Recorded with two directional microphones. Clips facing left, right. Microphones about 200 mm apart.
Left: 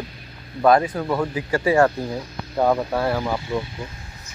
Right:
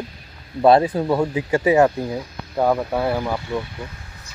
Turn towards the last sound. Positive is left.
turn(degrees=-10)  # may be behind; listen again after turning